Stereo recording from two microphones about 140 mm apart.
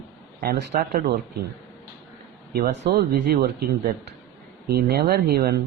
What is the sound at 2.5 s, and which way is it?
Speech, 90° right.